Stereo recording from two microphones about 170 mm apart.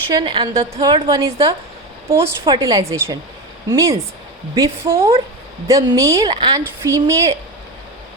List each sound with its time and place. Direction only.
0.1 s a woman's voice: 25° right (ahead or behind)